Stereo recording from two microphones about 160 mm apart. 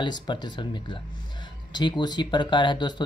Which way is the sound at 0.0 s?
30° left (ahead or behind).